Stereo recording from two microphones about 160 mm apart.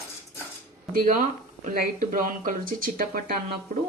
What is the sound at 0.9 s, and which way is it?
Speech, 50° right (ahead or behind).